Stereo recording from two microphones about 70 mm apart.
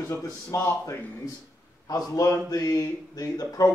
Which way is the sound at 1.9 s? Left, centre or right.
Left.